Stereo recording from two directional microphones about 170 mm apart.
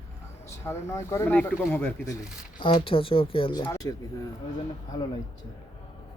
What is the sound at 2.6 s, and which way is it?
Speech, 30° left (ahead or behind).